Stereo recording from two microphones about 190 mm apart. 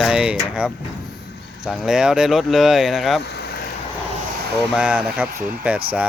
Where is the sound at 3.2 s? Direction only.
60° left (ahead or behind).